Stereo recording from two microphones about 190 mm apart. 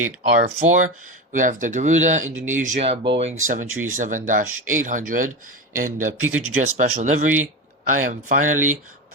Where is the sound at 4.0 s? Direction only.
45° right (ahead or behind).